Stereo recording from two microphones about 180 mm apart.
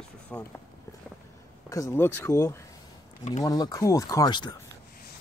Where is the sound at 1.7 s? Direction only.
15° left (ahead or behind).